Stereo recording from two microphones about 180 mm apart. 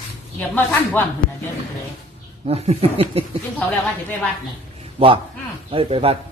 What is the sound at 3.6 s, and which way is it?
Speech, 5° left (ahead or behind).